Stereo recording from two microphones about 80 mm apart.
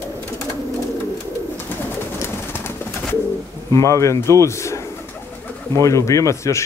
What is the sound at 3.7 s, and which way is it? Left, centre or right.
Speech, left.